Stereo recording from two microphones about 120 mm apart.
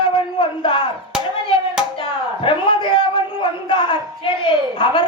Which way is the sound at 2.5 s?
45° left (ahead or behind).